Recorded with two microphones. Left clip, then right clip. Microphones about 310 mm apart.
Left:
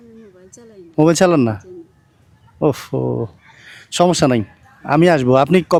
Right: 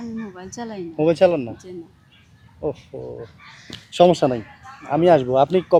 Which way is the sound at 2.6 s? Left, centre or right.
Left.